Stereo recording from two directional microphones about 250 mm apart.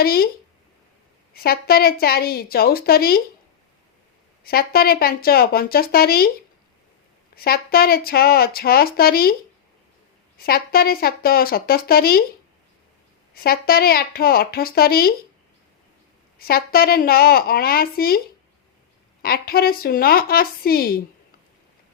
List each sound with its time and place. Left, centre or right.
0.0 s speech: left
1.3 s speech: left
4.4 s speech: left
7.3 s speech: left
10.3 s speech: left
13.3 s speech: left
16.4 s speech: left
19.2 s speech: left